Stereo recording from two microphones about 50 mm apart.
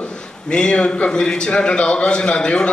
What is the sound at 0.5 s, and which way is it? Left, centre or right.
A man's voice, centre.